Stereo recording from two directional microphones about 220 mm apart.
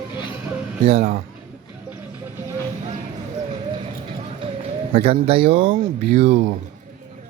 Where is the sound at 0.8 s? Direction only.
30° right (ahead or behind).